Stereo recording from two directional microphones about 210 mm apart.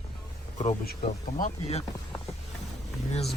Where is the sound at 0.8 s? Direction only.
45° left (ahead or behind).